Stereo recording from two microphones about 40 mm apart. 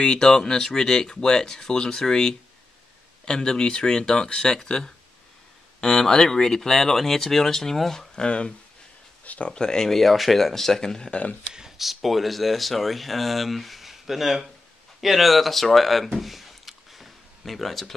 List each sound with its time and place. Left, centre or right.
0.0 s speech: centre
8.3 s speech: left
9.2 s a sound: left
9.5 s speech: centre
9.9 s speech: centre
11.1 s speech: left
11.5 s speech: centre
16.2 s a sound: centre